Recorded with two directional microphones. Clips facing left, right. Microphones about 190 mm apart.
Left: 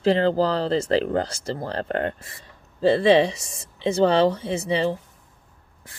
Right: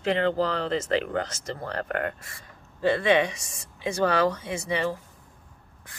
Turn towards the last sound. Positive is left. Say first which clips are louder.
# left 5 dB
turn(degrees=25)  # may be behind; listen again after turning